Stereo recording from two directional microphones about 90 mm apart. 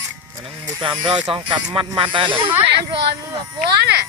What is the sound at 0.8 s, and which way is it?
Speech, 60° right (ahead or behind).